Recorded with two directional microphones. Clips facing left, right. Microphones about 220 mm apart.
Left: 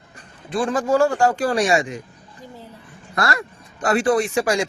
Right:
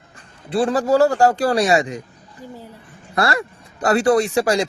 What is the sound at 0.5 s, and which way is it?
Speech, 35° right (ahead or behind).